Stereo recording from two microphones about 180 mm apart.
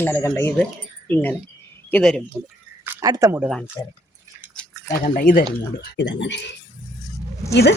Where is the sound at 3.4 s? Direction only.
Centre (ahead or behind).